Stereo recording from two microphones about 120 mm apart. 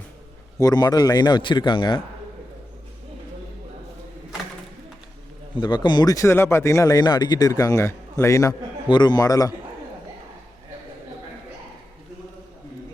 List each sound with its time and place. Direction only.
0.6 s speech: 35° left (ahead or behind)
5.5 s speech: 40° left (ahead or behind)
8.9 s speech: 35° left (ahead or behind)